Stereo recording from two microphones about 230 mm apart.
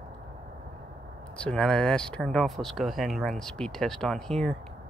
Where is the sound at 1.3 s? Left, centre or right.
Centre.